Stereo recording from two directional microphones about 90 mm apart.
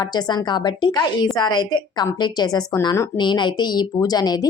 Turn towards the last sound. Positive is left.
turn(degrees=45)  # may be behind; listen again after turning